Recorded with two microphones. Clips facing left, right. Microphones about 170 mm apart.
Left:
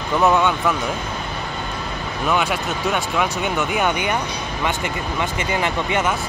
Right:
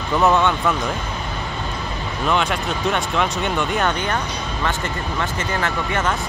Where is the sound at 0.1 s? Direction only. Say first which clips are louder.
Even; centre (ahead or behind).